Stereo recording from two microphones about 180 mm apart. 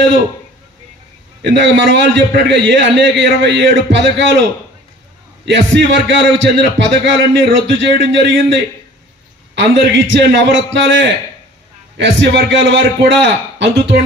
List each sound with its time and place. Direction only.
1.4 s a man's voice: 85° right
12.0 s a man's voice: 90° right